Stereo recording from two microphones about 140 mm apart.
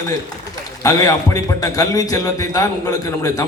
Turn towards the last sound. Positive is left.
turn(degrees=25)  # may be behind; listen again after turning